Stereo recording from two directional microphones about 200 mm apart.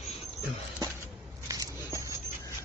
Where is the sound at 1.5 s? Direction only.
15° right (ahead or behind).